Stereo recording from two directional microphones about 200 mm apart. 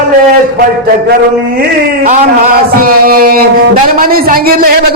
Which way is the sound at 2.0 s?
45° right (ahead or behind).